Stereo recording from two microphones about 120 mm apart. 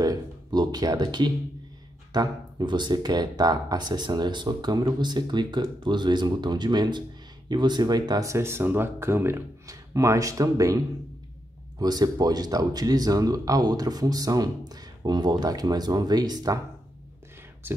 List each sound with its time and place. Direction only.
0.0 s speech: 35° right (ahead or behind)
11.8 s speech: 35° right (ahead or behind)
17.6 s speech: 20° right (ahead or behind)